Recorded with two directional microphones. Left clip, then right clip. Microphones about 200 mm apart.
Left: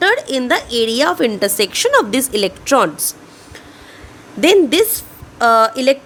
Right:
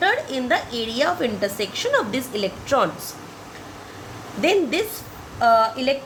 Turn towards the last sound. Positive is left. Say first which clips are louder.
# left 6 dB
turn(degrees=70)  # may be behind; listen again after turning